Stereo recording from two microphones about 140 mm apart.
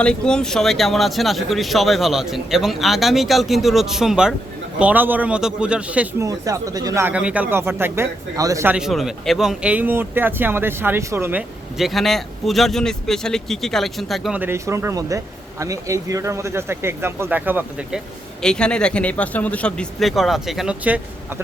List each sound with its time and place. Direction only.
0.0 s speech: 5° left (ahead or behind); by 6.2 s 10° right (ahead or behind)
6.2 s speech: 25° right (ahead or behind)
7.0 s speech: 10° right (ahead or behind)
8.6 s speech: 5° right (ahead or behind)
11.8 s speech: centre (ahead or behind)
14.3 s speech: 15° right (ahead or behind)
18.4 s speech: 5° left (ahead or behind); by 21.4 s 10° right (ahead or behind)